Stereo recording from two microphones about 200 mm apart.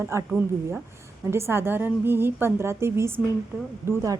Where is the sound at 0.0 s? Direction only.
15° right (ahead or behind).